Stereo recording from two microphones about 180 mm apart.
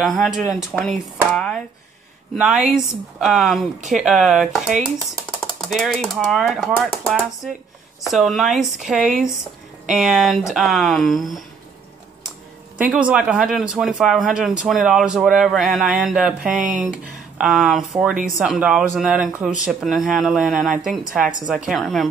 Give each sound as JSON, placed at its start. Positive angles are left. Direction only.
{"t": 0.0, "sound": "speech", "side_deg": 0}
{"t": 1.3, "sound": "a sound", "side_deg": 5}
{"t": 2.3, "sound": "speech", "side_deg": 0}
{"t": 12.7, "sound": "speech", "side_deg": -5}